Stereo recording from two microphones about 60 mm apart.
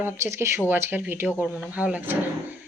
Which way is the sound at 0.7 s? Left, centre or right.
Right.